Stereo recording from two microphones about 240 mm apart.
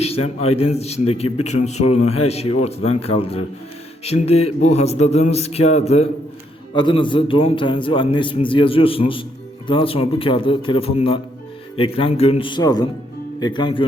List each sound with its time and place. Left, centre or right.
0.3 s a man's voice: left